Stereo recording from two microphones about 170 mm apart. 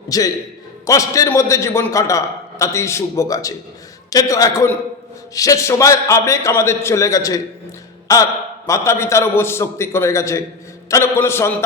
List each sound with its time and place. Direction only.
0.1 s a man's voice: 20° left (ahead or behind)